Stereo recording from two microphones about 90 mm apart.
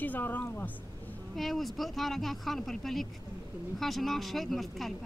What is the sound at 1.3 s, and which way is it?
Speech, centre (ahead or behind).